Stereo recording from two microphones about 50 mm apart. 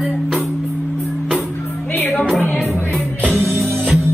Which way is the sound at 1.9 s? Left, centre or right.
Left.